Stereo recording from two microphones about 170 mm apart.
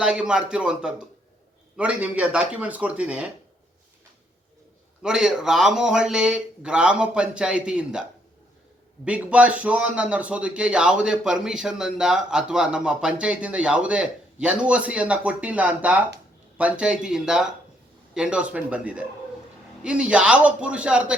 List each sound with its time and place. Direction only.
0.0 s a man's voice: 5° right (ahead or behind)
5.0 s speech: 5° right (ahead or behind)
9.0 s a man's voice: 10° right (ahead or behind)